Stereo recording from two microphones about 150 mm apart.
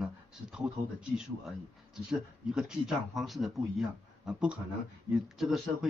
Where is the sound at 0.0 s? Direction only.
5° right (ahead or behind).